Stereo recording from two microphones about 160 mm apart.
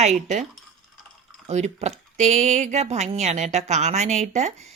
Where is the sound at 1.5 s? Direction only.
45° right (ahead or behind).